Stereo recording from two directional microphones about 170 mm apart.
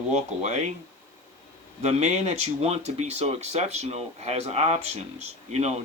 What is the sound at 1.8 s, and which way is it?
Speech, 40° right (ahead or behind).